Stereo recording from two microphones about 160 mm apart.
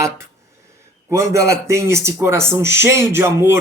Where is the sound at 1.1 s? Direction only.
20° right (ahead or behind).